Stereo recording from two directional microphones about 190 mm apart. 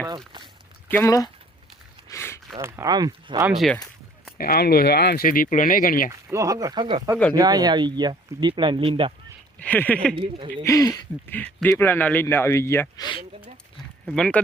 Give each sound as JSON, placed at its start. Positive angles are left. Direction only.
{"t": 0.9, "sound": "speech", "side_deg": 15}
{"t": 2.0, "sound": "a sound", "side_deg": 15}
{"t": 2.6, "sound": "speech", "side_deg": -15}
{"t": 3.4, "sound": "speech", "side_deg": 0}
{"t": 4.4, "sound": "speech", "side_deg": 55}
{"t": 6.1, "sound": "speech", "side_deg": -15}
{"t": 9.6, "sound": "a man's voice", "side_deg": 10}
{"t": 10.2, "sound": "speech", "side_deg": -30}
{"t": 10.6, "sound": "a man's voice", "side_deg": 15}
{"t": 14.1, "sound": "speech", "side_deg": 5}